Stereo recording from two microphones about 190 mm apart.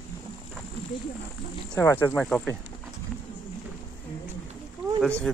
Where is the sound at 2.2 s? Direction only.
5° left (ahead or behind).